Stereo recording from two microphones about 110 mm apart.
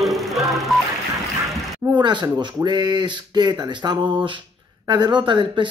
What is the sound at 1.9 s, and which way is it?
Speech, 45° right (ahead or behind).